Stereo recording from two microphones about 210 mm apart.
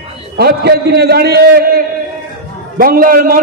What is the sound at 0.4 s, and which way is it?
A man's voice, 50° right (ahead or behind).